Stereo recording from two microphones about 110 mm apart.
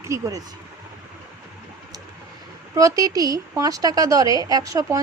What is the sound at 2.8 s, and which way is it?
A woman's voice, 30° right (ahead or behind).